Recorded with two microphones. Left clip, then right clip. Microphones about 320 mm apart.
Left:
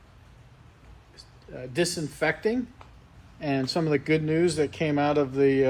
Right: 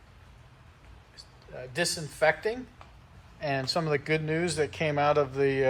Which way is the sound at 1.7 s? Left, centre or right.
Centre.